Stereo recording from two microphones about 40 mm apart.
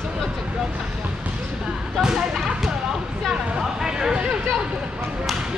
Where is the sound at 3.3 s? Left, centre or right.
Centre.